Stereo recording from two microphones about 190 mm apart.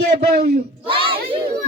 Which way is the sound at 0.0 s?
55° right (ahead or behind).